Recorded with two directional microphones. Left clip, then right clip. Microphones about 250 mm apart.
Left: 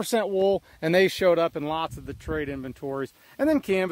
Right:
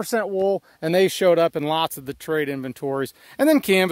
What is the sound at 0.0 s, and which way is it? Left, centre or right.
Speech, centre.